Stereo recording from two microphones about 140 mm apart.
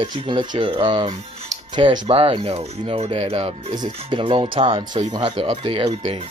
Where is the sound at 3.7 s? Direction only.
35° right (ahead or behind).